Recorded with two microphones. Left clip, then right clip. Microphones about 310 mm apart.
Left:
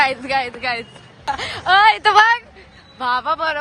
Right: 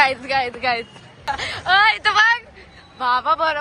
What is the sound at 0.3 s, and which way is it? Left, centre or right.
A woman's voice, centre.